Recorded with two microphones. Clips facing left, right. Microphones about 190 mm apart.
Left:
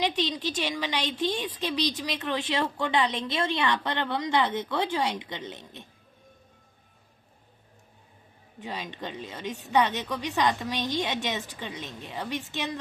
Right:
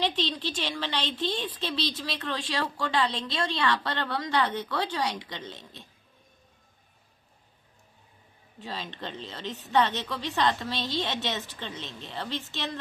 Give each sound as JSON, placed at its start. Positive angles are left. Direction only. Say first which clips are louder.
{"t": 0.0, "sound": "a woman's voice", "louder": "left 1 dB", "side_deg": 15}
{"t": 8.5, "sound": "a woman's voice", "louder": "left 1 dB", "side_deg": 15}